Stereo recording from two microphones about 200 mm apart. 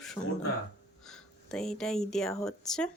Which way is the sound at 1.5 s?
5° left (ahead or behind).